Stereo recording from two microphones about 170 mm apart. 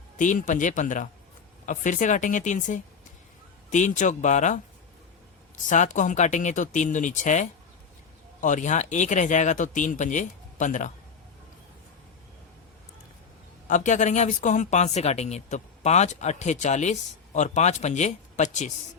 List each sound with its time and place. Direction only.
0.2 s a woman's voice: 50° left (ahead or behind)
5.6 s a woman's voice: 45° left (ahead or behind)
13.7 s a woman's voice: 45° left (ahead or behind)